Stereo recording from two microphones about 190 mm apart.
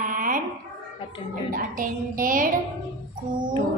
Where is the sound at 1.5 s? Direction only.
45° right (ahead or behind).